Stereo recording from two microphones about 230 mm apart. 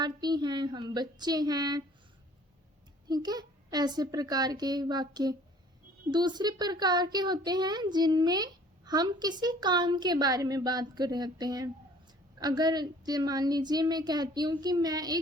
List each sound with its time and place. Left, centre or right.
0.0 s a child's voice: centre
3.1 s a child's voice: centre